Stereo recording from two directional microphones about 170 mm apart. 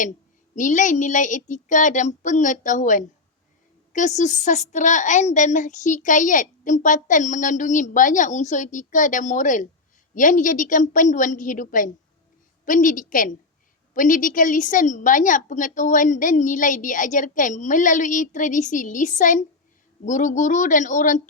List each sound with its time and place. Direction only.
0.5 s a woman's voice: 50° left (ahead or behind)